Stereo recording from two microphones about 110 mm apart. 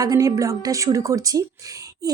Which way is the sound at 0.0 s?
30° right (ahead or behind).